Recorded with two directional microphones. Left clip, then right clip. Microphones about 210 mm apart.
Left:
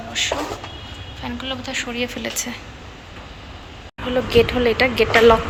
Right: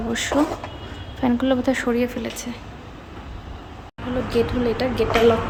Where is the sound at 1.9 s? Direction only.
20° right (ahead or behind).